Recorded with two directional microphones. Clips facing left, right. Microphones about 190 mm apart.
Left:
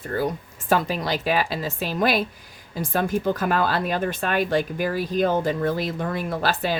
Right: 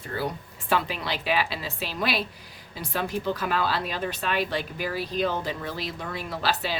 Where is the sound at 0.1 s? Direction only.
45° left (ahead or behind).